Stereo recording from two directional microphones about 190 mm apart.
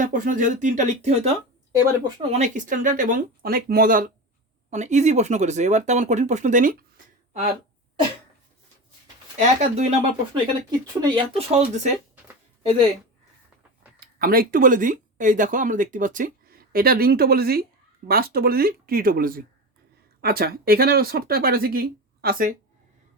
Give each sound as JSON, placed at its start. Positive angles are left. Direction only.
{"t": 0.0, "sound": "speech", "side_deg": -45}
{"t": 1.8, "sound": "speech", "side_deg": -20}
{"t": 2.3, "sound": "speech", "side_deg": -40}
{"t": 9.6, "sound": "speech", "side_deg": -35}
{"t": 10.3, "sound": "speech", "side_deg": -25}
{"t": 14.0, "sound": "speech", "side_deg": -50}